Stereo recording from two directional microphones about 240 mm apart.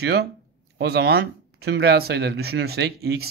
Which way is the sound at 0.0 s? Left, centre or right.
Right.